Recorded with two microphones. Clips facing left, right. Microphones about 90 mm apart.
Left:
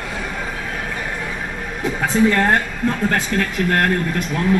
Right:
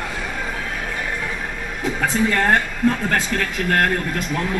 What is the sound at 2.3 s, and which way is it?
Speech, 15° left (ahead or behind).